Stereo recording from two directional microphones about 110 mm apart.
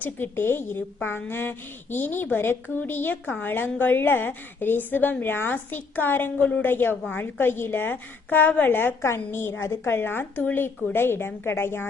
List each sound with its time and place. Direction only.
0.0 s speech: 20° left (ahead or behind)